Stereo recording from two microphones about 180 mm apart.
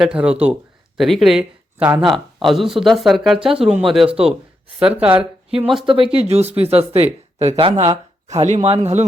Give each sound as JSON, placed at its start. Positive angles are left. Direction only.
{"t": 0.0, "sound": "speech", "side_deg": -5}
{"t": 5.8, "sound": "speech", "side_deg": -30}